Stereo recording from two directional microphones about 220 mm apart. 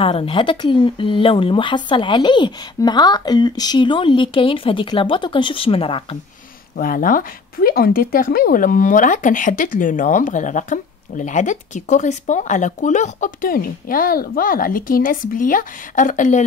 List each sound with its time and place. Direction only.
0.0 s speech: 25° left (ahead or behind)
6.8 s speech: 40° left (ahead or behind)